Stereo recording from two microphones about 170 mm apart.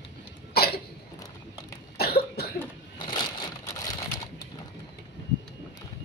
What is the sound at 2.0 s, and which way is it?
Cough, 65° left (ahead or behind).